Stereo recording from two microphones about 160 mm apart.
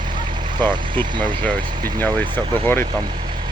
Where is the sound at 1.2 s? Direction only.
10° left (ahead or behind).